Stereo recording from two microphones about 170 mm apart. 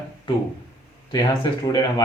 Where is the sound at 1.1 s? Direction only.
25° left (ahead or behind).